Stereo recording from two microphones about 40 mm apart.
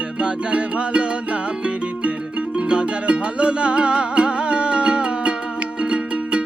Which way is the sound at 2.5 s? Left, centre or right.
Right.